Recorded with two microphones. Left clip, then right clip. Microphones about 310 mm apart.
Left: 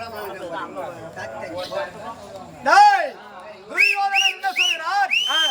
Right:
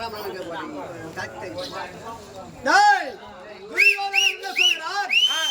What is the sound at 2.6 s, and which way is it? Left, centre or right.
Speech, centre.